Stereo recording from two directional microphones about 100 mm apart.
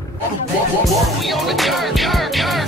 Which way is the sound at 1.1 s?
Centre (ahead or behind).